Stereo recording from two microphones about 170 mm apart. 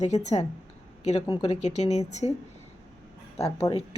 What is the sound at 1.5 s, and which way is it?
Speech, 40° left (ahead or behind).